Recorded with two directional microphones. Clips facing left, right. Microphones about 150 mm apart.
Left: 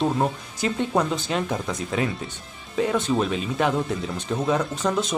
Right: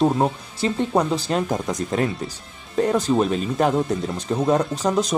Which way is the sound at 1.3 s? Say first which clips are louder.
Right 3 dB; 45° right (ahead or behind).